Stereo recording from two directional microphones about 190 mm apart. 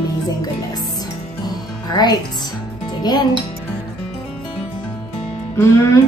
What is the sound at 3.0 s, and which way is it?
Speech, 20° left (ahead or behind).